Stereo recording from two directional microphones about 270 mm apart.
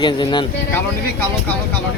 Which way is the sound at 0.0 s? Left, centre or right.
Centre.